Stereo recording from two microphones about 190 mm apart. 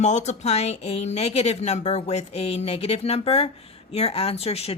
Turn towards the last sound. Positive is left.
turn(degrees=30)  # may be behind; listen again after turning